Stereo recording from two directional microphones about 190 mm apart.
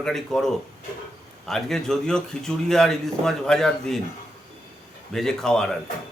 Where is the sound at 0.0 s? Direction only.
Centre (ahead or behind).